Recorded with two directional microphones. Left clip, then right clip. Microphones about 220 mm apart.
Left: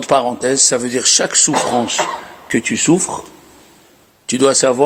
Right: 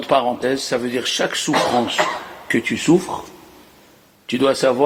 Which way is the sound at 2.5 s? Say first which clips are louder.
Left 2 dB; 50° left (ahead or behind).